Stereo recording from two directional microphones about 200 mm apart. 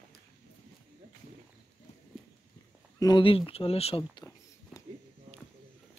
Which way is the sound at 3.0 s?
20° left (ahead or behind).